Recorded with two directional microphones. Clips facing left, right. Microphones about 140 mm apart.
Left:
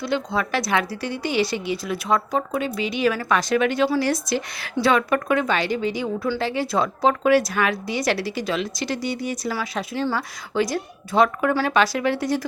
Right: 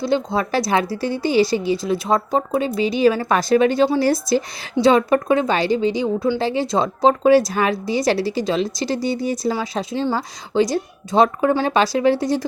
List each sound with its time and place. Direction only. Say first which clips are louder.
0.0 s a woman's voice: right 4 dB; 25° right (ahead or behind)